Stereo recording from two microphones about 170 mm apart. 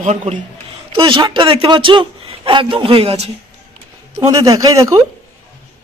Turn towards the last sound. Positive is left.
turn(degrees=-20)  # may be behind; listen again after turning